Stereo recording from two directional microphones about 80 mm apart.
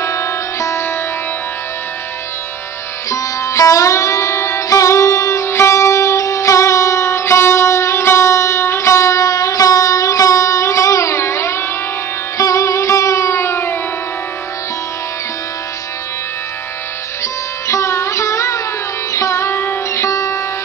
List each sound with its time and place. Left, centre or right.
0.0 s music: left
3.1 s music: left
17.2 s music: left